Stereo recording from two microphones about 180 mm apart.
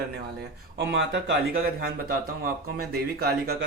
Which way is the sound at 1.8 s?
55° right (ahead or behind).